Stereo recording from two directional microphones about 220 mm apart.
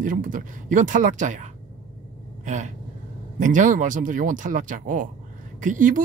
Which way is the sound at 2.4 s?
35° right (ahead or behind).